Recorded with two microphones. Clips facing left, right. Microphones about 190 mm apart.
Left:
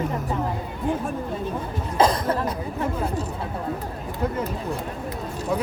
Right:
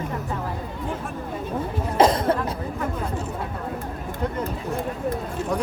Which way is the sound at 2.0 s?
25° right (ahead or behind).